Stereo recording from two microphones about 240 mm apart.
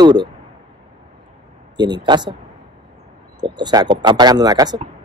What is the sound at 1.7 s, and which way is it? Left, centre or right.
Speech, centre.